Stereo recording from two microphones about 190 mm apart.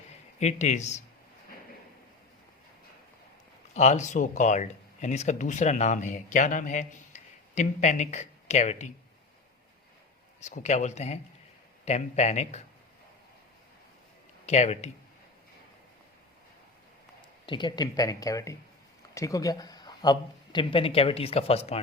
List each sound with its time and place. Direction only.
0.3 s speech: 35° left (ahead or behind)
3.8 s speech: 40° left (ahead or behind)
10.4 s speech: 40° left (ahead or behind)
14.4 s speech: 35° left (ahead or behind)
17.2 s speech: 25° left (ahead or behind)